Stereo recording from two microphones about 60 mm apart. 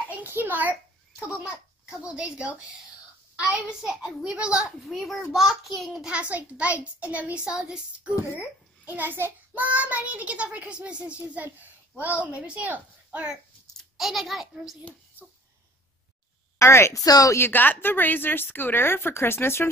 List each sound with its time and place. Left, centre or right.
0.1 s a sound: right
1.9 s a child's voice: centre
3.5 s a child's voice: centre
4.8 s a child's voice: centre
6.0 s a child's voice: right
8.4 s a child's voice: right
13.9 s a child's voice: centre
16.5 s a woman's voice: left
16.9 s speech: left
17.4 s a woman's voice: left